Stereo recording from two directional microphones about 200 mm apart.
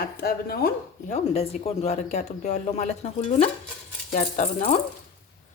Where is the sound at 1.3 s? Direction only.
30° left (ahead or behind).